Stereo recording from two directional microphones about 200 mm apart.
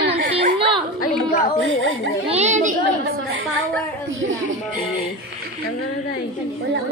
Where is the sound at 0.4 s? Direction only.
25° right (ahead or behind).